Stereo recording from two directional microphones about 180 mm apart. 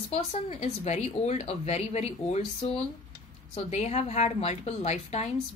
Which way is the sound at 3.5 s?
40° left (ahead or behind).